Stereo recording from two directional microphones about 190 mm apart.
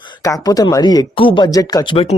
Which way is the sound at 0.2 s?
20° left (ahead or behind).